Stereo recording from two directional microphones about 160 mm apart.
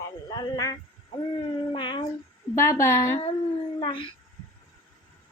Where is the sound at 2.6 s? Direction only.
15° left (ahead or behind).